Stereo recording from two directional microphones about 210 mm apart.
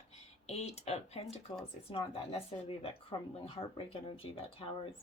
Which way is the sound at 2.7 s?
25° left (ahead or behind).